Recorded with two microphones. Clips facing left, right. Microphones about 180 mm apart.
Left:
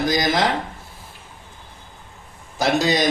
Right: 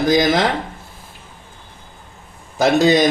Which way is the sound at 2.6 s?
55° right (ahead or behind).